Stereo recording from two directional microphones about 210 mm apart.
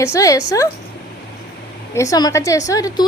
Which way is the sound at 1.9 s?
15° left (ahead or behind).